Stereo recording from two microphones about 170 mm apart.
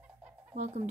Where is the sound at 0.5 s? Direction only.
40° right (ahead or behind).